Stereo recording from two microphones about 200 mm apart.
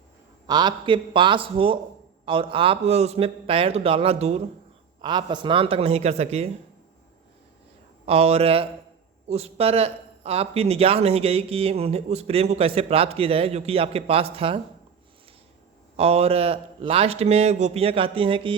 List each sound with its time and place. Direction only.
0.4 s speech: 20° right (ahead or behind)
8.0 s speech: 30° right (ahead or behind)
16.0 s speech: 30° right (ahead or behind)